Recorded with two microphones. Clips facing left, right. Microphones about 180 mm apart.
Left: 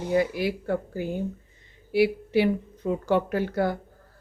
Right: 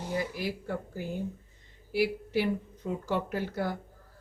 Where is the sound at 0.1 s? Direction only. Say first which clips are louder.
Left 9 dB; 75° left (ahead or behind).